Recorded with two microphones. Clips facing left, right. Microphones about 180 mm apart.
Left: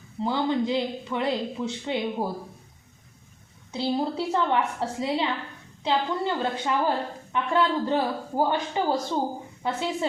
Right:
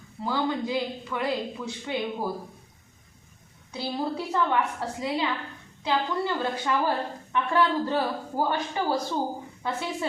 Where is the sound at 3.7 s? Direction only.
25° left (ahead or behind).